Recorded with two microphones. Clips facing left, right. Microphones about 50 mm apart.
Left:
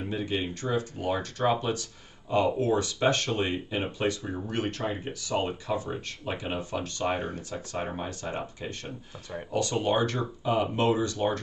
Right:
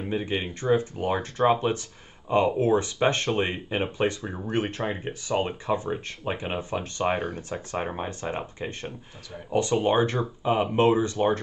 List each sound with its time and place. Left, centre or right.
0.1 s speech: right